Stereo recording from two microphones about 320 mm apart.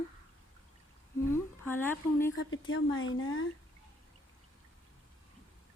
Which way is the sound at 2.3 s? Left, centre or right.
Left.